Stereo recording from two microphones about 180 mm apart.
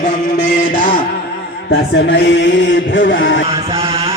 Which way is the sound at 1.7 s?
70° left (ahead or behind).